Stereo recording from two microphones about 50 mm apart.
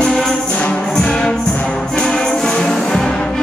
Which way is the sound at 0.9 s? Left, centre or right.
Centre.